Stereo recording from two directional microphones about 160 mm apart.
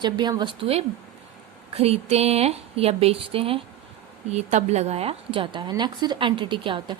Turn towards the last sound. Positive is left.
turn(degrees=-30)  # may be behind; listen again after turning